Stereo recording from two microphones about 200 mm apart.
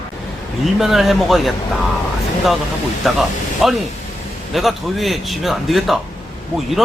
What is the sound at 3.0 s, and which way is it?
Speech, centre (ahead or behind).